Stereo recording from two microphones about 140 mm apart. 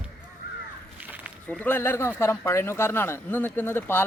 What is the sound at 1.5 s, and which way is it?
A man's voice, 15° left (ahead or behind).